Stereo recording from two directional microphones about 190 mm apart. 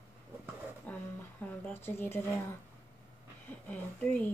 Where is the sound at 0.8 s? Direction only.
10° left (ahead or behind).